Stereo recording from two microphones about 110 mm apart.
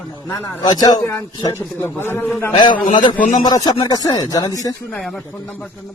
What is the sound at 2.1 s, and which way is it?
Speech, 20° left (ahead or behind).